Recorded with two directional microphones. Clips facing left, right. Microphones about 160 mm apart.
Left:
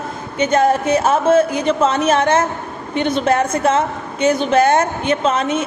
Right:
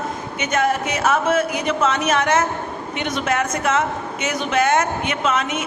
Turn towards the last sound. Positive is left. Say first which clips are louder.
# left 5 dB
turn(degrees=30)  # may be behind; listen again after turning